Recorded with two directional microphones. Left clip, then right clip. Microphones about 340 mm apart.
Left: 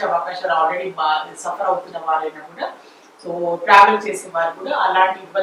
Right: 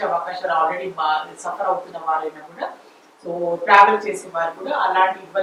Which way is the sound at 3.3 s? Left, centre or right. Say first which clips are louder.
Left 1 dB; centre.